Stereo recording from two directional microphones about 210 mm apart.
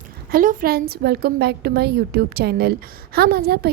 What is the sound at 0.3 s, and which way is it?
A woman's voice, 45° right (ahead or behind).